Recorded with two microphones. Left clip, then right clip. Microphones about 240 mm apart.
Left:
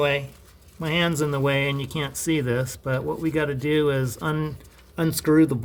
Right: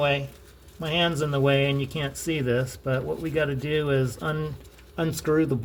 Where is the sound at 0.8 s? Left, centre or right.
Left.